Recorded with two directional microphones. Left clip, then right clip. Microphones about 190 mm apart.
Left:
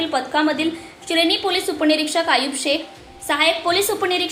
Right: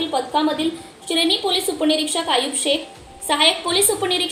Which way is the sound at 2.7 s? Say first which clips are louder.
Even; 45° left (ahead or behind).